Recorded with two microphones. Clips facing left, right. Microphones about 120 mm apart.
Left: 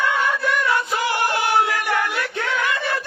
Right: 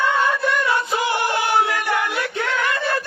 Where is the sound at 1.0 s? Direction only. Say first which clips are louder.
Even; 20° right (ahead or behind).